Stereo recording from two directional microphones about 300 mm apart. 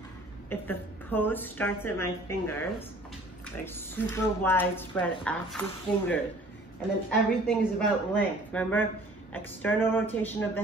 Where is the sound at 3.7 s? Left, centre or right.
Centre.